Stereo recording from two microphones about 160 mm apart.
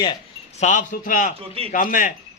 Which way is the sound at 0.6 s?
50° left (ahead or behind).